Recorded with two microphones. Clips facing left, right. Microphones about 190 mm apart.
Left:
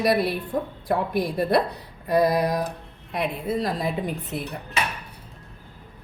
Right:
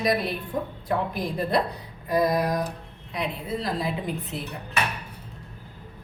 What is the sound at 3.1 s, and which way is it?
A woman's voice, 55° left (ahead or behind).